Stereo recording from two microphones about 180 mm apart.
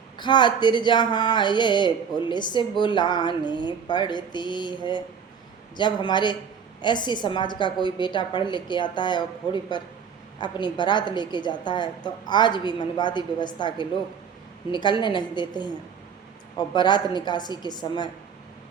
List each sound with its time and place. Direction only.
0.2 s a woman's voice: 25° left (ahead or behind)